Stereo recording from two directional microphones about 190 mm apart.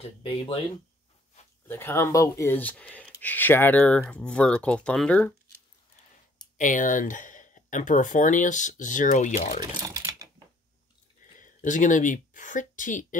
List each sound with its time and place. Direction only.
1.7 s speech: 15° left (ahead or behind)
6.6 s speech: 45° left (ahead or behind)
9.8 s sewing machine: 20° right (ahead or behind)
11.3 s a woman's voice: 45° left (ahead or behind)